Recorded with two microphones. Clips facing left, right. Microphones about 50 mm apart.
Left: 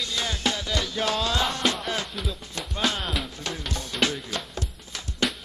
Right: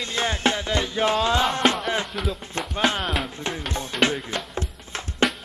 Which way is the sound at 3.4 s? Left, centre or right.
Right.